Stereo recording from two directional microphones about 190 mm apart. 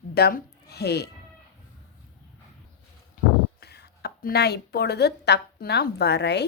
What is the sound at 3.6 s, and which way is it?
A woman's voice, 60° left (ahead or behind).